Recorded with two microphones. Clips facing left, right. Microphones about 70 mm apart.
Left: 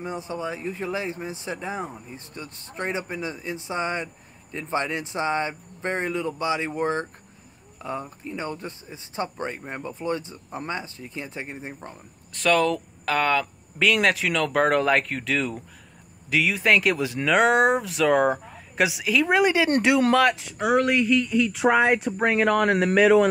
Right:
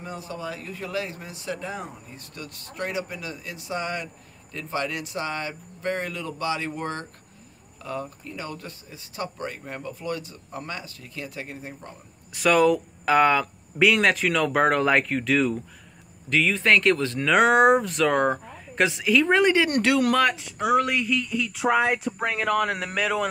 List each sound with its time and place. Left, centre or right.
0.0 s speech: left
12.3 s speech: centre
13.9 s speech: centre
17.3 s speech: centre; by 20.2 s left
20.6 s speech: left